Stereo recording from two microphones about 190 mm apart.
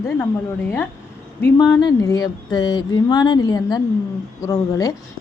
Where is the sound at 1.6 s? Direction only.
20° left (ahead or behind).